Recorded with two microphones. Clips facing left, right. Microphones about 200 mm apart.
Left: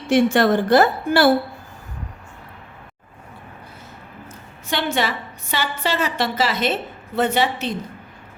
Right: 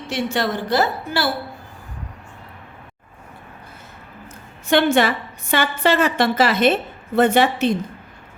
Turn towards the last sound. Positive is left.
turn(degrees=-55)  # may be behind; listen again after turning